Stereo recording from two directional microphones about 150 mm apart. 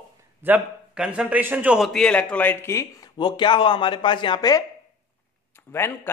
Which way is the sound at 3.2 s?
30° left (ahead or behind).